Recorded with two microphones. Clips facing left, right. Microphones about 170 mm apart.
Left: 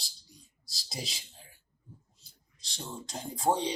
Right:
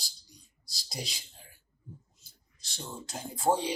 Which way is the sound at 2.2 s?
35° left (ahead or behind).